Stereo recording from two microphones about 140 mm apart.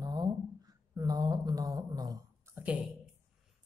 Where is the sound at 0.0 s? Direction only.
30° right (ahead or behind).